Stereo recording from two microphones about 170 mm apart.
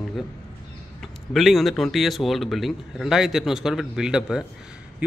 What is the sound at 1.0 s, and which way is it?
Speech, centre (ahead or behind).